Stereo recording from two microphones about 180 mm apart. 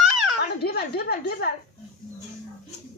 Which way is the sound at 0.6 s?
60° left (ahead or behind).